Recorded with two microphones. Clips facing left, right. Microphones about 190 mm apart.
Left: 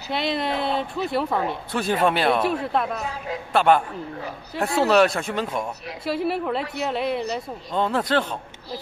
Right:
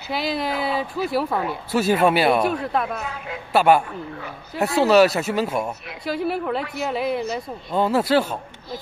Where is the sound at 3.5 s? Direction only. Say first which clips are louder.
Right 2 dB; 10° right (ahead or behind).